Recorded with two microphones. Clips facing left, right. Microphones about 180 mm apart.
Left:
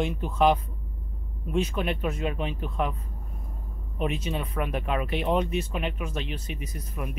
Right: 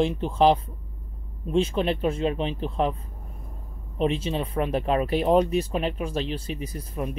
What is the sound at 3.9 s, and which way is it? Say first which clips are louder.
Speech: right 5 dB; 30° right (ahead or behind).